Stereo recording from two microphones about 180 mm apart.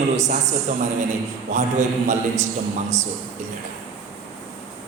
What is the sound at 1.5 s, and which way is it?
Speech, 45° right (ahead or behind).